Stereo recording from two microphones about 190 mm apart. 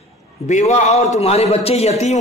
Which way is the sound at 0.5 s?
40° left (ahead or behind).